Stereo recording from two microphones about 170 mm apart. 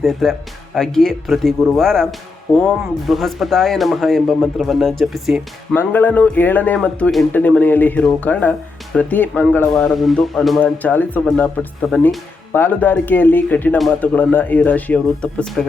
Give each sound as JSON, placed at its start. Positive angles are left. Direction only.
{"t": 0.0, "sound": "speech", "side_deg": 0}
{"t": 5.7, "sound": "speech", "side_deg": 10}